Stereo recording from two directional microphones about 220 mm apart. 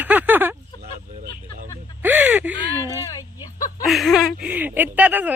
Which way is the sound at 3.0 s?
15° left (ahead or behind).